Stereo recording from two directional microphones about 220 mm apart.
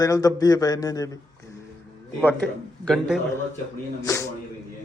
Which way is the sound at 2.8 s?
Centre (ahead or behind).